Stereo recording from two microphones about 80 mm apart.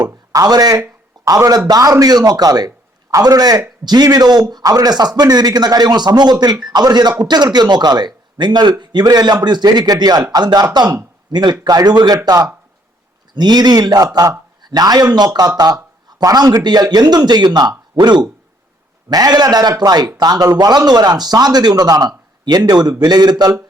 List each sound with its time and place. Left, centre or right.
0.0 s a man's voice: right
19.1 s a man's voice: right